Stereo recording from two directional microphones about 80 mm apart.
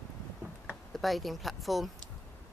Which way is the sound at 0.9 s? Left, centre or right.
Centre.